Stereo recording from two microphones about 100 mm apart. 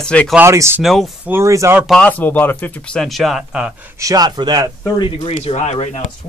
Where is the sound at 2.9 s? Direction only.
Centre (ahead or behind).